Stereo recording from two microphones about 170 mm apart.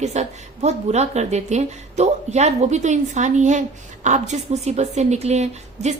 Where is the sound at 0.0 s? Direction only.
40° right (ahead or behind).